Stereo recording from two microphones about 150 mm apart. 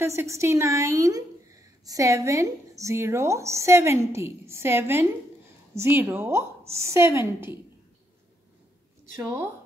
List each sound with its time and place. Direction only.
0.0 s a woman's voice: 15° right (ahead or behind)
9.2 s a woman's voice: 15° right (ahead or behind)